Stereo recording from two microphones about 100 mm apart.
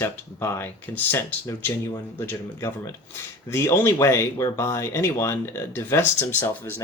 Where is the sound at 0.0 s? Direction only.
25° left (ahead or behind).